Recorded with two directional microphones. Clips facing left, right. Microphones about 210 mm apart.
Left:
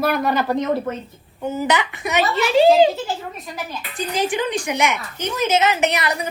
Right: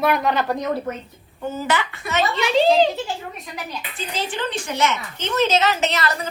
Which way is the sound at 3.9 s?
15° left (ahead or behind).